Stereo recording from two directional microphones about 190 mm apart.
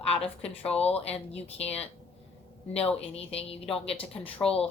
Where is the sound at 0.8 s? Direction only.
30° left (ahead or behind).